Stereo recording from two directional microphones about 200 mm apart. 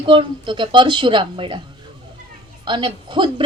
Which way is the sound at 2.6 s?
25° right (ahead or behind).